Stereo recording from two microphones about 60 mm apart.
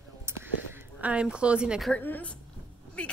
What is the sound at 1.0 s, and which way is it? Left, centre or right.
Speech, right.